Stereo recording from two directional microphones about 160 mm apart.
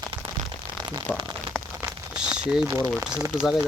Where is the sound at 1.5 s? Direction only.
10° right (ahead or behind).